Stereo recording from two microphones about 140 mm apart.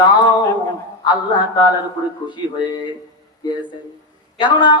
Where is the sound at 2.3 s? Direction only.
30° left (ahead or behind).